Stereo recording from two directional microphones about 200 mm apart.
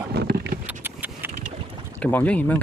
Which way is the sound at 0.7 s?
10° right (ahead or behind).